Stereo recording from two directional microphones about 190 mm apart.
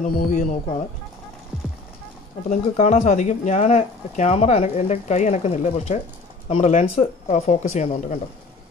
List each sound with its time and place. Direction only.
0.0 s speech: 45° left (ahead or behind)
2.5 s speech: 40° left (ahead or behind)